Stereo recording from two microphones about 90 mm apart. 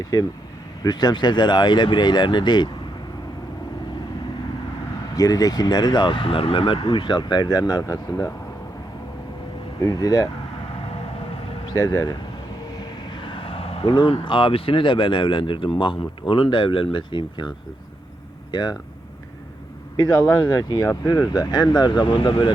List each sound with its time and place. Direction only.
0.9 s speech: 50° left (ahead or behind)
5.1 s speech: 40° left (ahead or behind)
9.8 s speech: 45° left (ahead or behind)
11.7 s speech: 40° left (ahead or behind)
12.7 s speech: 55° left (ahead or behind)
18.5 s speech: 50° left (ahead or behind)
20.2 s speech: 50° left (ahead or behind)